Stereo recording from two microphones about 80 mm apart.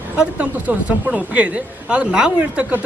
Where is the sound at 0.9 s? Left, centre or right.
Centre.